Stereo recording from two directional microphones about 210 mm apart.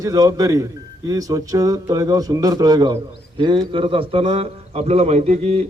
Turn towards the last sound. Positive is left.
turn(degrees=-30)  # may be behind; listen again after turning